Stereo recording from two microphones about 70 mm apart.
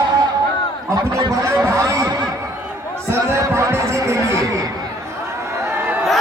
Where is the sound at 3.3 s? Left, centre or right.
Right.